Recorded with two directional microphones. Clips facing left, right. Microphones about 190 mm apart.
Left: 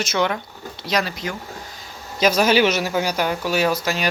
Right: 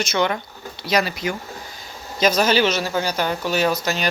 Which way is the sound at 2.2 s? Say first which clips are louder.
Left 1 dB; 10° left (ahead or behind).